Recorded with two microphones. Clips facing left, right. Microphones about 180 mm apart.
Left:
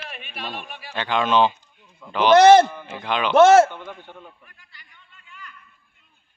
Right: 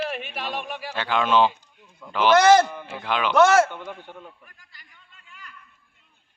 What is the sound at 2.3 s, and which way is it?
Speech, 25° left (ahead or behind).